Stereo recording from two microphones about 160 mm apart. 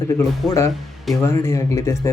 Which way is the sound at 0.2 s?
20° left (ahead or behind).